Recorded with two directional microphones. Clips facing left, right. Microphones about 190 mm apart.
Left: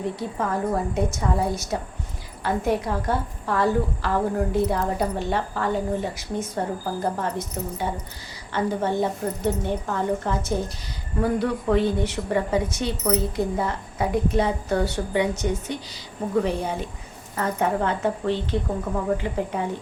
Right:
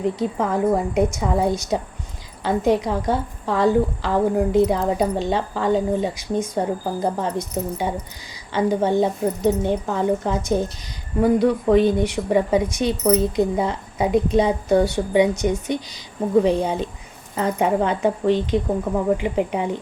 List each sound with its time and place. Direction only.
0.0 s a woman's voice: 20° right (ahead or behind)